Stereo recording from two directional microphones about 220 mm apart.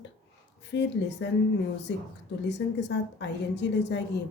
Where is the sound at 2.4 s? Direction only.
50° left (ahead or behind).